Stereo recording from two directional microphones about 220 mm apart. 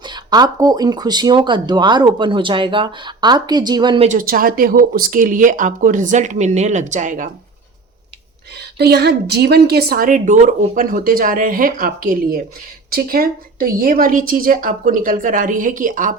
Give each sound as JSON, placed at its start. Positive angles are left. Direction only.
{"t": 0.0, "sound": "speech", "side_deg": -20}
{"t": 8.5, "sound": "a woman's voice", "side_deg": -50}